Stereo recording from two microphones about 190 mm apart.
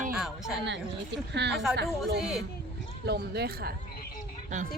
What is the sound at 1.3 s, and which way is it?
Speech, 65° right (ahead or behind).